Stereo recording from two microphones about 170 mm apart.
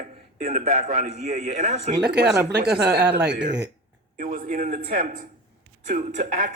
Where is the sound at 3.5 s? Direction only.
90° right.